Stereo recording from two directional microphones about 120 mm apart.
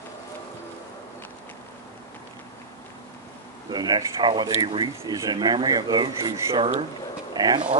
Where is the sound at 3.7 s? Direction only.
35° right (ahead or behind).